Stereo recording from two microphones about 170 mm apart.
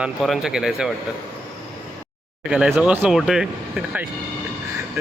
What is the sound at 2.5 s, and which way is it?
Speech, 5° right (ahead or behind).